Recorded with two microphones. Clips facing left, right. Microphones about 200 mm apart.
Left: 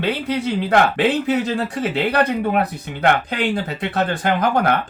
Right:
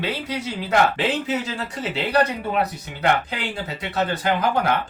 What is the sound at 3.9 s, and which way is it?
Speech, 55° left (ahead or behind).